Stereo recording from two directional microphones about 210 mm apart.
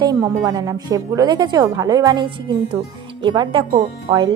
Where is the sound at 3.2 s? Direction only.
20° right (ahead or behind).